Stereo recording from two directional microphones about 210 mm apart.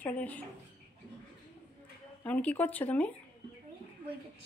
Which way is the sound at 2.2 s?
5° left (ahead or behind).